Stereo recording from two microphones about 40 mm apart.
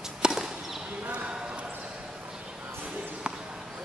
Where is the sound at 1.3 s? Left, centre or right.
Right.